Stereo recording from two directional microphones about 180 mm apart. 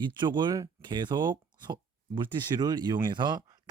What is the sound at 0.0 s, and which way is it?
Speech, 25° right (ahead or behind).